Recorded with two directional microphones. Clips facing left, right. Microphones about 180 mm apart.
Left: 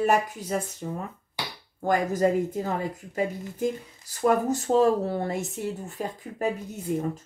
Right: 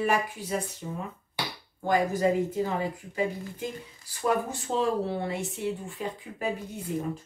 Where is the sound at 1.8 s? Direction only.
45° left (ahead or behind).